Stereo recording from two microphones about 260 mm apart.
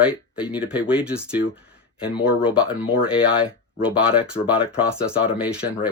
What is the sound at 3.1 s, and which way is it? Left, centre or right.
Speech, centre.